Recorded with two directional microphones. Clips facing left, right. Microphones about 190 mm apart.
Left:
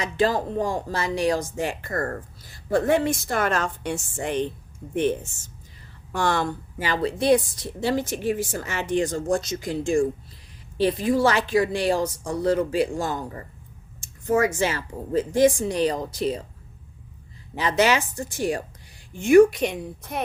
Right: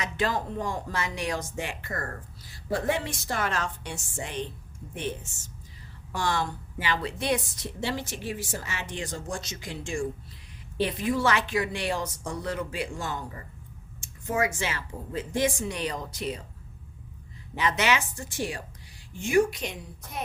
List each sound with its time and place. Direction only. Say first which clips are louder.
0.0 s a woman's voice: left 6 dB; 35° left (ahead or behind); by 4.4 s 55° left (ahead or behind)
6.1 s a woman's voice: left 5 dB; 55° left (ahead or behind); by 16.4 s 35° left (ahead or behind)
17.6 s a woman's voice: left 5 dB; 35° left (ahead or behind); by 20.2 s 60° left (ahead or behind)